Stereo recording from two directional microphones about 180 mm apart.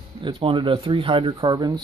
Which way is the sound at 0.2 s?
30° right (ahead or behind).